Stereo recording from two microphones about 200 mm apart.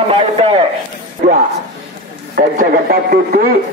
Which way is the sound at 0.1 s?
25° right (ahead or behind).